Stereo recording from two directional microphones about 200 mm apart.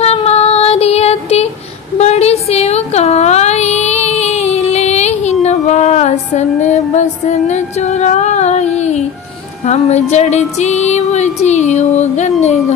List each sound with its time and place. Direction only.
0.0 s female singing: 30° left (ahead or behind)
2.0 s a sound: 35° left (ahead or behind)
9.7 s music: 35° left (ahead or behind)